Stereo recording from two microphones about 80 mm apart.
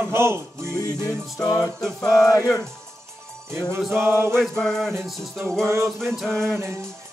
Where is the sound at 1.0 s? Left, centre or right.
Left.